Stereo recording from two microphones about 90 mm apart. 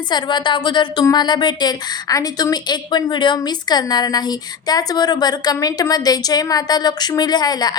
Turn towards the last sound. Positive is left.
turn(degrees=50)  # may be behind; listen again after turning